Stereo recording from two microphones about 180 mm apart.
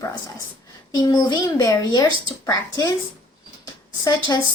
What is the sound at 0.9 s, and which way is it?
Speech, 20° left (ahead or behind).